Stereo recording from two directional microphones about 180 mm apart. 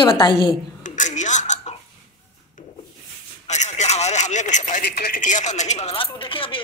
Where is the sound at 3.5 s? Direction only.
40° left (ahead or behind).